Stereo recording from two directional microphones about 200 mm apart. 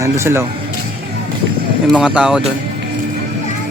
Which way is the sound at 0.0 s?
15° right (ahead or behind).